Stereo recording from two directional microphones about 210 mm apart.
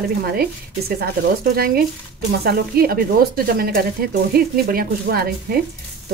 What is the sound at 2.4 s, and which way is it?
A woman's voice, 45° right (ahead or behind).